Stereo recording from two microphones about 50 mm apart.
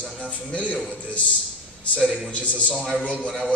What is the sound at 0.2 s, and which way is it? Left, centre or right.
Speech, left.